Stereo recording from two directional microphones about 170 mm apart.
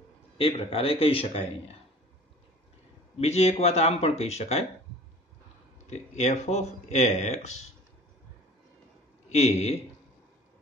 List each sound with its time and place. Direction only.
0.4 s speech: 35° left (ahead or behind)
3.2 s speech: 40° left (ahead or behind)
5.9 s speech: 40° left (ahead or behind)
9.3 s speech: 40° left (ahead or behind)